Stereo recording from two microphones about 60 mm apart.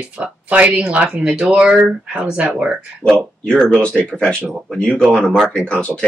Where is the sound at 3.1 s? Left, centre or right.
Centre.